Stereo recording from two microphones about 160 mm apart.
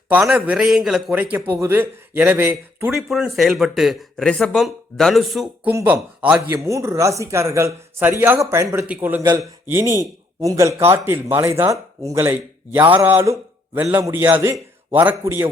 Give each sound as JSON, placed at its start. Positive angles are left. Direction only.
{"t": 0.1, "sound": "speech", "side_deg": -5}